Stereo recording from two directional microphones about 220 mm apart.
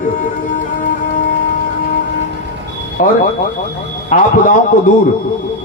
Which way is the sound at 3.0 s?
35° left (ahead or behind).